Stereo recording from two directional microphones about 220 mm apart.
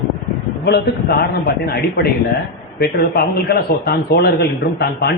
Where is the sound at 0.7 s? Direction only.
45° left (ahead or behind).